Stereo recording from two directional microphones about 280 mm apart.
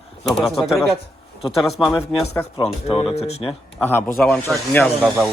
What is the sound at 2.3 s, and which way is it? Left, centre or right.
Speech, centre.